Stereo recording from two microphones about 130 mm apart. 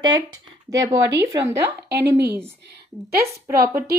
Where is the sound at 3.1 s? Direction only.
20° right (ahead or behind).